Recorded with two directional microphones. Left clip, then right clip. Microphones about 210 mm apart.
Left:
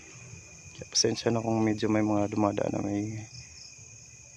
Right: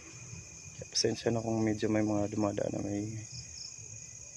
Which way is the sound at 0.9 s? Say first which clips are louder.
Left 4 dB; 25° left (ahead or behind).